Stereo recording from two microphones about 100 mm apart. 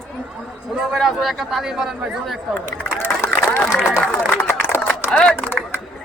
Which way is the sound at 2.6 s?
20° left (ahead or behind).